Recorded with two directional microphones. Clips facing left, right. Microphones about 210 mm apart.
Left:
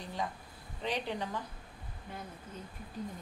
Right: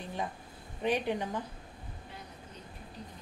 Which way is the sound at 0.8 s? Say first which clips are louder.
Right 5 dB; 15° right (ahead or behind).